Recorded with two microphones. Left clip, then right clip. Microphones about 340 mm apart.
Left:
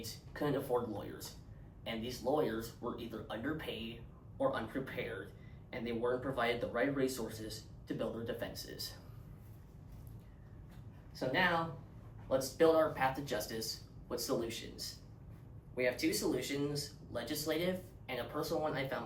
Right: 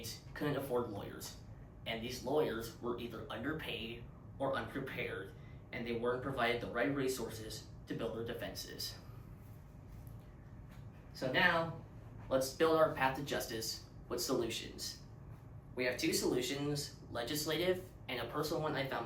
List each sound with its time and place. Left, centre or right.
0.0 s speech: centre
1.8 s speech: centre
11.1 s speech: centre